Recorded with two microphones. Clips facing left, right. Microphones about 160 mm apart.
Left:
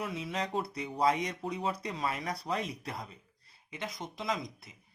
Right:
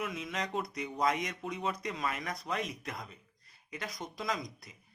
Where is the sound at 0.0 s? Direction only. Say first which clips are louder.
Left 2 dB; 30° left (ahead or behind).